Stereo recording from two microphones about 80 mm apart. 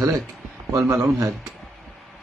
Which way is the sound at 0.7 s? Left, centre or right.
Right.